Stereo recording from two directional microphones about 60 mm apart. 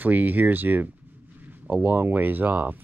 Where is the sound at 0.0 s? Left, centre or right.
Right.